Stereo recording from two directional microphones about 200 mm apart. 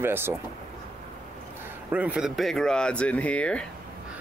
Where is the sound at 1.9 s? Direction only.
5° right (ahead or behind).